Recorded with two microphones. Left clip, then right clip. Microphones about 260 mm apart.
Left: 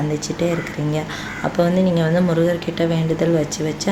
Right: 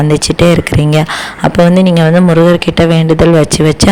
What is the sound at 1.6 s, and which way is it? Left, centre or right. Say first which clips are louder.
Speech: right 9 dB; right.